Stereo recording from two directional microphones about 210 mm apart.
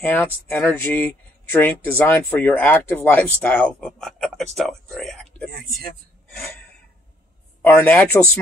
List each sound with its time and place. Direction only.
0.0 s speech: 10° left (ahead or behind)
5.5 s speech: 45° right (ahead or behind)
7.6 s speech: 10° left (ahead or behind)